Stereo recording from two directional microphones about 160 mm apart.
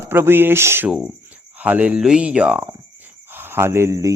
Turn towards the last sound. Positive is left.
turn(degrees=-20)  # may be behind; listen again after turning